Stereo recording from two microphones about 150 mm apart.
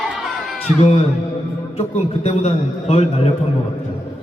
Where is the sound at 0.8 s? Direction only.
40° left (ahead or behind).